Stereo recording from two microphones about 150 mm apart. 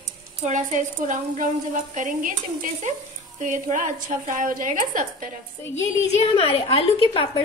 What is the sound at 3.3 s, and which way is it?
A woman's voice, 55° right (ahead or behind).